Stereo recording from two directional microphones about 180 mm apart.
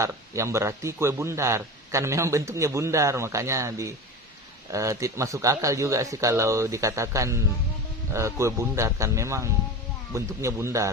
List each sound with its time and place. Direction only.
0.0 s speech: 15° right (ahead or behind)